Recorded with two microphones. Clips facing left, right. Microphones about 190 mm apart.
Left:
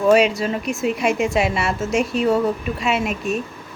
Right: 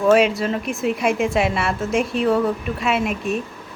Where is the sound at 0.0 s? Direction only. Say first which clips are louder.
Even; centre (ahead or behind).